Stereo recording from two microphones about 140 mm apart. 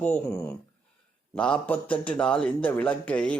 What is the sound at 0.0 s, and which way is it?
Speech, 10° left (ahead or behind).